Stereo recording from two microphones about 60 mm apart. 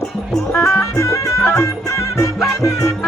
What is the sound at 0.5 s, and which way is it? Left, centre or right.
Music, left.